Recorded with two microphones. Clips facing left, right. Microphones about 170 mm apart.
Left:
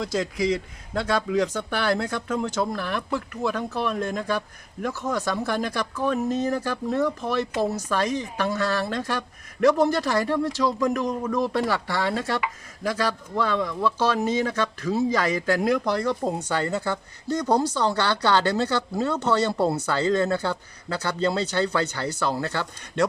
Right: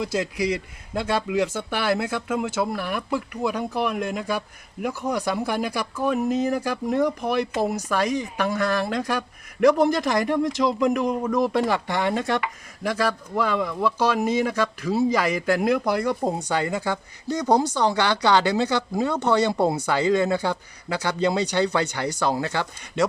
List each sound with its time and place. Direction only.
0.0 s speech: 10° right (ahead or behind)